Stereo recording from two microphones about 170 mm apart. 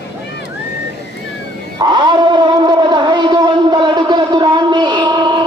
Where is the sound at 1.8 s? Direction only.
25° right (ahead or behind).